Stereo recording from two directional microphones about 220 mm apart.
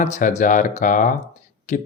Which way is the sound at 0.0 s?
35° left (ahead or behind).